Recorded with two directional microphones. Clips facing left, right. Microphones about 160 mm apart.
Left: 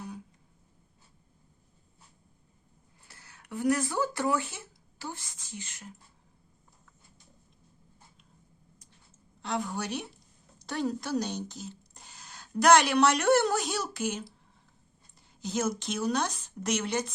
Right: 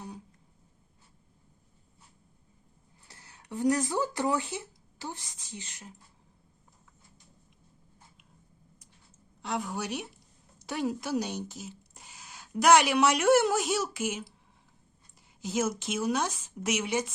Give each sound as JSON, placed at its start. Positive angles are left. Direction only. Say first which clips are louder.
{"t": 3.1, "sound": "a woman's voice", "louder": "even", "side_deg": -20}
{"t": 9.4, "sound": "speech", "louder": "left 1 dB", "side_deg": 0}
{"t": 15.4, "sound": "speech", "louder": "right 1 dB", "side_deg": -5}